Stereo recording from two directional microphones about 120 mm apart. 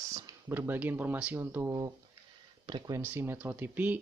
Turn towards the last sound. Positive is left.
turn(degrees=-15)  # may be behind; listen again after turning